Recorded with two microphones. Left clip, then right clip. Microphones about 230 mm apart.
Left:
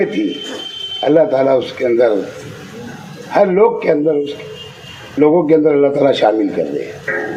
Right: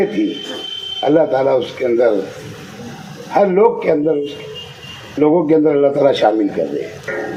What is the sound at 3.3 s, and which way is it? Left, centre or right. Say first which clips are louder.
A man's voice: left 1 dB; left.